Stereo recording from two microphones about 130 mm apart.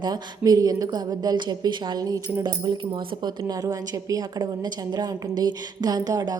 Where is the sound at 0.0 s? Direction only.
30° right (ahead or behind).